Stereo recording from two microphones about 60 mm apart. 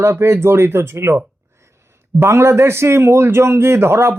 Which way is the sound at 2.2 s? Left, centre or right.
Right.